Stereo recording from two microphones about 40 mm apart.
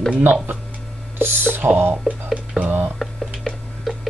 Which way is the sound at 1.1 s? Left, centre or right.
Right.